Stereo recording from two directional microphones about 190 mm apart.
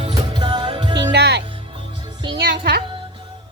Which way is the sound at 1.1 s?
60° right (ahead or behind).